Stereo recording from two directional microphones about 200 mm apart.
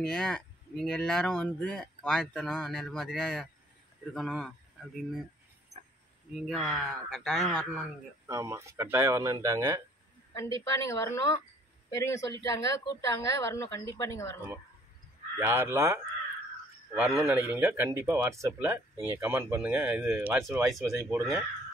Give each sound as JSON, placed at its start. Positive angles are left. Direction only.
{"t": 0.0, "sound": "speech", "side_deg": 5}
{"t": 6.4, "sound": "speech", "side_deg": 0}
{"t": 8.3, "sound": "speech", "side_deg": -15}
{"t": 10.3, "sound": "speech", "side_deg": 15}
{"t": 15.3, "sound": "speech", "side_deg": -10}